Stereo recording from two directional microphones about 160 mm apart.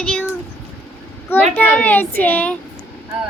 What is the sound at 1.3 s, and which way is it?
A child's voice, 10° left (ahead or behind).